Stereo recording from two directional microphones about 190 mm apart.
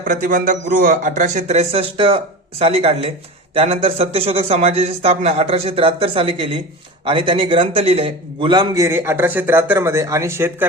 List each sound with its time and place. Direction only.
0.0 s a man's voice: 45° right (ahead or behind); by 10.7 s 10° right (ahead or behind)